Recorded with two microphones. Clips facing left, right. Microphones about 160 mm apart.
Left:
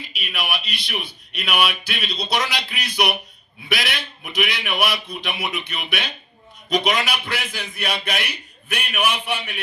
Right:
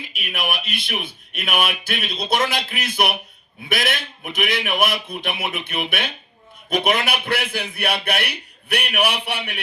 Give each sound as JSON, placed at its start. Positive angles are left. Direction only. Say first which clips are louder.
{"t": 0.1, "sound": "a man's voice", "louder": "right 1 dB", "side_deg": -50}